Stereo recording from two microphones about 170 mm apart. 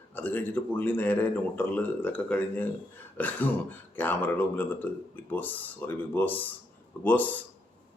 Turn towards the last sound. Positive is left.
turn(degrees=10)  # may be behind; listen again after turning